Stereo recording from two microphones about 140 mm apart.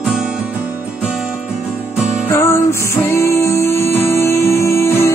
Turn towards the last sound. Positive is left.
turn(degrees=20)  # may be behind; listen again after turning